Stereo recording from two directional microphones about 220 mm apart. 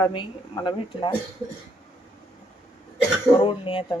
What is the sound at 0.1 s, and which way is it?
A woman's voice, 20° left (ahead or behind).